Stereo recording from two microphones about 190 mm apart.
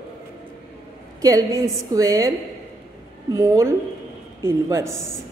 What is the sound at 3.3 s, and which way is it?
Speech, 15° right (ahead or behind).